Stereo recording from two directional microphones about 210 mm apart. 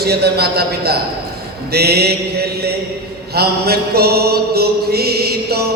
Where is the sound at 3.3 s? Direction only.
50° right (ahead or behind).